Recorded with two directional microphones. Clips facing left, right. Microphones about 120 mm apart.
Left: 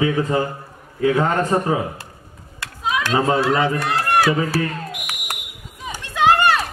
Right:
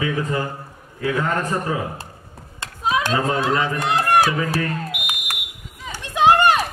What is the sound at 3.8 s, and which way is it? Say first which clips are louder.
Run: right 1 dB; 20° right (ahead or behind).